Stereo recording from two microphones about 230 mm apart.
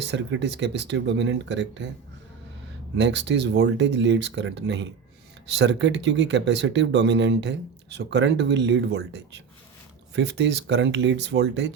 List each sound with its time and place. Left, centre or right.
0.0 s speech: right
2.9 s speech: right